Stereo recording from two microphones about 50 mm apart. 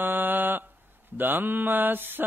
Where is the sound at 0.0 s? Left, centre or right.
Right.